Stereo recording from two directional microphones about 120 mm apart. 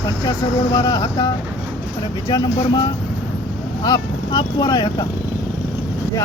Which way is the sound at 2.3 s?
35° left (ahead or behind).